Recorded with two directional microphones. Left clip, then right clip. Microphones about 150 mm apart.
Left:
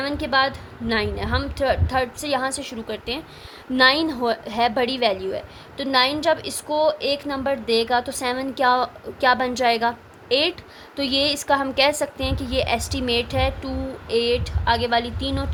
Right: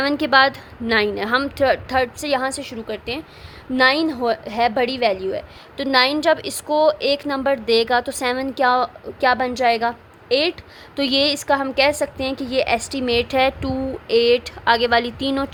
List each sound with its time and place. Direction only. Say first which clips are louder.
0.0 s a woman's voice: right 5 dB; 40° right (ahead or behind)
5.7 s a woman's voice: right 3 dB; 45° right (ahead or behind)
10.9 s a woman's voice: right 3 dB; 45° right (ahead or behind)